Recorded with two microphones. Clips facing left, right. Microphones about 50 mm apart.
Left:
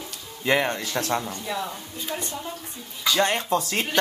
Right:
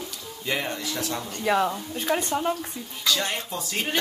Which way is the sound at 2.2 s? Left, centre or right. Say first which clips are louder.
Right 8 dB; right.